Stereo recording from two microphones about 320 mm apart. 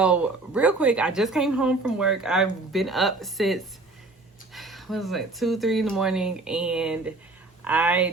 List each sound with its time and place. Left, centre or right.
0.0 s speech: centre